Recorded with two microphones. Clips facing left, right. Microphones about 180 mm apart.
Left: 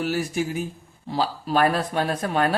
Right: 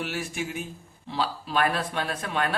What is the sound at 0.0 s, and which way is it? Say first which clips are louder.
Speech: left 7 dB; 40° left (ahead or behind).